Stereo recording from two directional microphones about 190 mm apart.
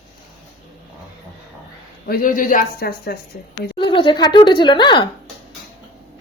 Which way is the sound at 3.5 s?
25° left (ahead or behind).